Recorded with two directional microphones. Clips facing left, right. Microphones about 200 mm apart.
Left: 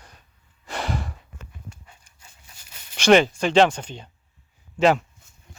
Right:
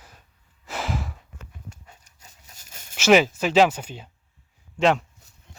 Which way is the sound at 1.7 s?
40° right (ahead or behind).